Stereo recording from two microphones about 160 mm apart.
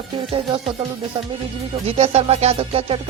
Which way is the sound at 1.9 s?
40° right (ahead or behind).